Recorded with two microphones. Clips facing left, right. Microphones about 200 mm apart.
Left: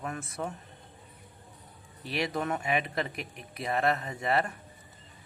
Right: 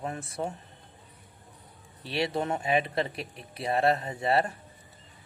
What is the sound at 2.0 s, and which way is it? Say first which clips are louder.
Speech: right 2 dB; 30° right (ahead or behind).